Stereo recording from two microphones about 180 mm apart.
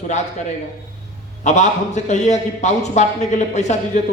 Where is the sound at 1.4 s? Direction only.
40° left (ahead or behind).